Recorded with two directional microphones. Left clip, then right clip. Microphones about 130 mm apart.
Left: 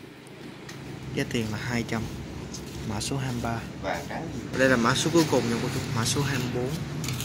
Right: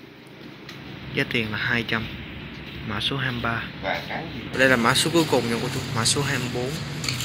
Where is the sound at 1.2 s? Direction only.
15° left (ahead or behind).